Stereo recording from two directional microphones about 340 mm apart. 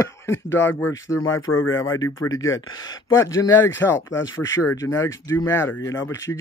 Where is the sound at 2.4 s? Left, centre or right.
Left.